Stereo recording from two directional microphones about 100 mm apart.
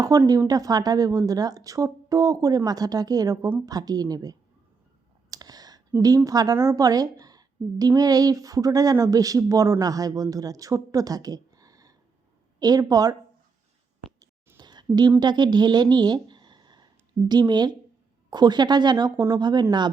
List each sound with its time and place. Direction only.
0.3 s a woman's voice: 40° right (ahead or behind)
5.3 s clicking: 40° right (ahead or behind)
6.0 s a woman's voice: 35° right (ahead or behind)
14.6 s a sound: 45° right (ahead or behind)
14.9 s speech: 40° right (ahead or behind)